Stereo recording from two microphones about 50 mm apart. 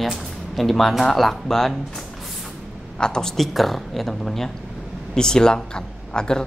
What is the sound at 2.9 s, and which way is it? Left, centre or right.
Speech, centre.